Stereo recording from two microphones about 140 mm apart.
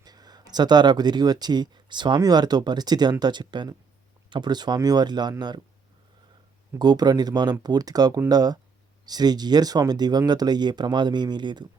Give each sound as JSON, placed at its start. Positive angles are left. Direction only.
{"t": 0.0, "sound": "speech", "side_deg": -30}
{"t": 6.7, "sound": "speech", "side_deg": -30}